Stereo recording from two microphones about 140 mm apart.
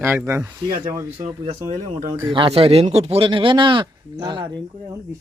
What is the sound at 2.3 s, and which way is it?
Speech, 35° right (ahead or behind).